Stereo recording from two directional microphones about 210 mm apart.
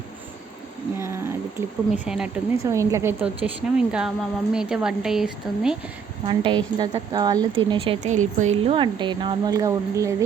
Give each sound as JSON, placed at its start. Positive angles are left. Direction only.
{"t": 0.9, "sound": "speech", "side_deg": -10}
{"t": 2.6, "sound": "a woman's voice", "side_deg": -15}
{"t": 6.2, "sound": "speech", "side_deg": -25}